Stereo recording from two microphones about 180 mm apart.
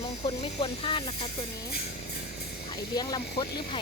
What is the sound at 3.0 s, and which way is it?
Speech, 20° left (ahead or behind).